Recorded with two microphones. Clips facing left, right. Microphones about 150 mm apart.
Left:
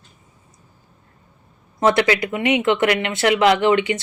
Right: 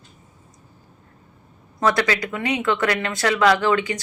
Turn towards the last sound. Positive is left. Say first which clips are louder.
# left 3 dB
turn(degrees=20)  # may be behind; listen again after turning